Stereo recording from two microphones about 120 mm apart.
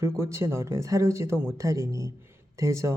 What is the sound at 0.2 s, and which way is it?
Speech, 25° right (ahead or behind).